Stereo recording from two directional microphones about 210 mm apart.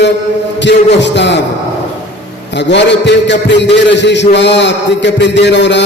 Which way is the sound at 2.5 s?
55° left (ahead or behind).